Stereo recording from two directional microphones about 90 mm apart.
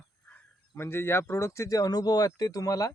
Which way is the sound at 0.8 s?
25° left (ahead or behind).